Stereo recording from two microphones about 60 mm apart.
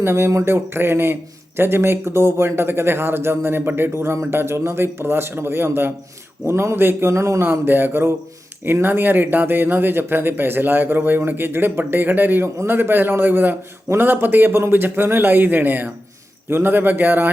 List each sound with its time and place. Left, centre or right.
0.0 s speech: right
7.4 s speech: right